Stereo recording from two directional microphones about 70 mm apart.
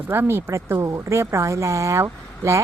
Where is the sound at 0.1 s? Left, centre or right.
Right.